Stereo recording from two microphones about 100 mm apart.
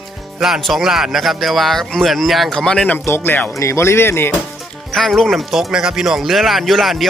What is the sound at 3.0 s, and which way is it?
Speech, 25° left (ahead or behind).